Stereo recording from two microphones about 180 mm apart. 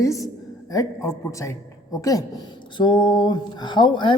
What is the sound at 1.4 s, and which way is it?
A woman's voice, 20° left (ahead or behind).